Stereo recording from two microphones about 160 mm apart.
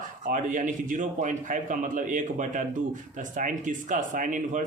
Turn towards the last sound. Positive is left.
turn(degrees=-55)  # may be behind; listen again after turning